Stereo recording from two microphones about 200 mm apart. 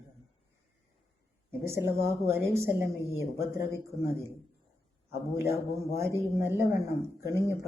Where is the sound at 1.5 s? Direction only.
15° right (ahead or behind).